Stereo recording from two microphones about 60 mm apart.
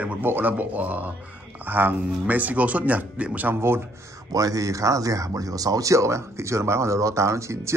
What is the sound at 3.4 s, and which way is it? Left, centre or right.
Speech, right.